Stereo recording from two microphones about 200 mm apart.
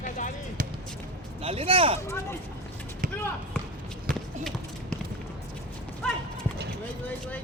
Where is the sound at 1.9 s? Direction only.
15° left (ahead or behind).